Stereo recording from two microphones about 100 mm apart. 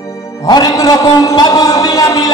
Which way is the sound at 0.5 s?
45° left (ahead or behind).